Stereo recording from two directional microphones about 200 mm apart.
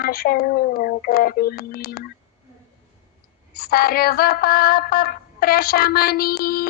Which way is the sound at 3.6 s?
50° left (ahead or behind).